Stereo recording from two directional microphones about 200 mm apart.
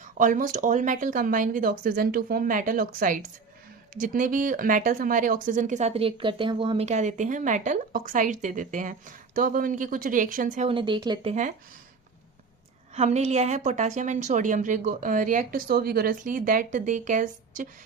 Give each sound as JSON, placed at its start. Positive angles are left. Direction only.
{"t": 0.0, "sound": "speech", "side_deg": -40}
{"t": 10.7, "sound": "speech", "side_deg": -25}
{"t": 12.9, "sound": "speech", "side_deg": -35}